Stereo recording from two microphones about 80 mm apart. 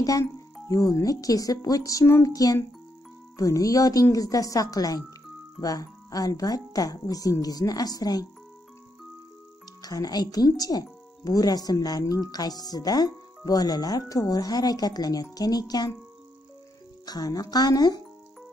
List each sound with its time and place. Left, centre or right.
0.2 s speech: left
9.8 s speech: left
17.0 s speech: left